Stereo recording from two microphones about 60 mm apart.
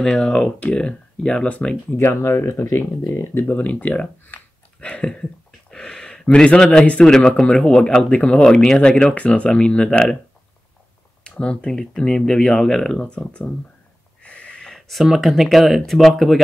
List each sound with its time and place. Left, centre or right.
0.0 s speech: centre
1.9 s speech: left
2.6 s speech: left
3.4 s speech: left
7.2 s speech: centre
7.4 s speech: centre
11.2 s speech: centre
14.2 s a sound: centre
14.7 s speech: centre